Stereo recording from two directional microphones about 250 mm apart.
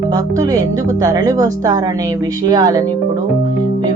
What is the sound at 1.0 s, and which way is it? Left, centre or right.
A woman's voice, centre.